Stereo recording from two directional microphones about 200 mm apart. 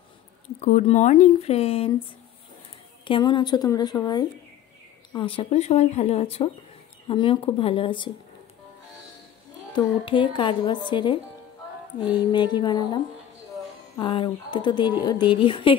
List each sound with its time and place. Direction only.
0.6 s speech: 35° left (ahead or behind)
3.1 s speech: 20° left (ahead or behind)
9.7 s speech: 25° left (ahead or behind)